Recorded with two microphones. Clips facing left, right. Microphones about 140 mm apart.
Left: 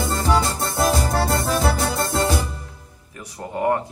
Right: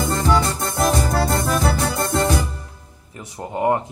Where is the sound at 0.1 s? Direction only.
25° left (ahead or behind).